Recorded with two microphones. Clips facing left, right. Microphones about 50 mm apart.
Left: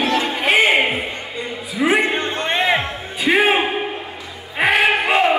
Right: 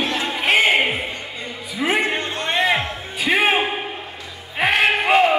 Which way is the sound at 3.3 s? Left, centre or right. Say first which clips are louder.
Left 3 dB; centre.